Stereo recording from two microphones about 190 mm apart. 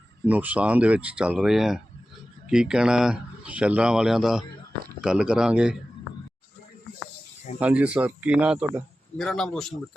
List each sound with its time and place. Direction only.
0.3 s a man's voice: 10° right (ahead or behind)
7.6 s a man's voice: 5° right (ahead or behind)